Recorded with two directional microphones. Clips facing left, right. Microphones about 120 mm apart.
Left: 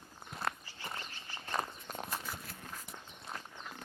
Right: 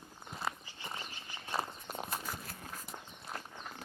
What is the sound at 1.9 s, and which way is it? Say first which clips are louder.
Walk: right 1 dB; 5° right (ahead or behind).